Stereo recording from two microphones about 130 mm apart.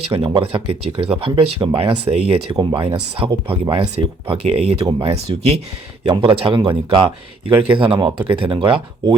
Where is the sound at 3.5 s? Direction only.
45° right (ahead or behind).